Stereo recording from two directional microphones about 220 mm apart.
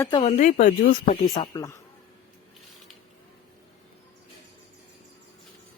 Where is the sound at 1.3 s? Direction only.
20° left (ahead or behind).